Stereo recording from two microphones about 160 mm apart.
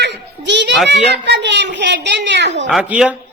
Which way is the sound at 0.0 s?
90° right.